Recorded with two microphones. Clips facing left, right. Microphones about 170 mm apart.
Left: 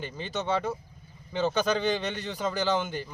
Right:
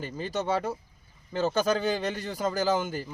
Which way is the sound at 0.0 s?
5° right (ahead or behind).